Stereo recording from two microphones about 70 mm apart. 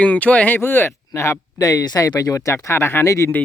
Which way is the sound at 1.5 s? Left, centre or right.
Left.